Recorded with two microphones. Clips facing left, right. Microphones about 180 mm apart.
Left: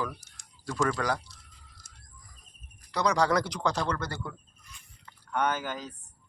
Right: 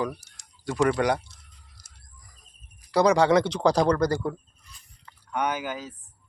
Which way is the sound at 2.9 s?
30° right (ahead or behind).